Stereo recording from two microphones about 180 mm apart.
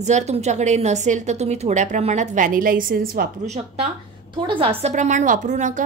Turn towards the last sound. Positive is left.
turn(degrees=-45)  # may be behind; listen again after turning